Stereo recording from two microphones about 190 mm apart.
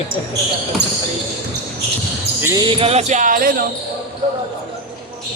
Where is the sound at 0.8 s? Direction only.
60° right (ahead or behind).